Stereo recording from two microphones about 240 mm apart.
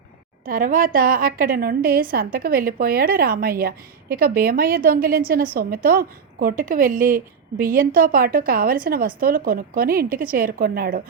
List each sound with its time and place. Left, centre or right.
0.4 s a woman's voice: right